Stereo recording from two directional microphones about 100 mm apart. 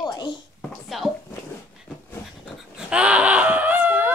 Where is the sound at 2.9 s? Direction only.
10° right (ahead or behind).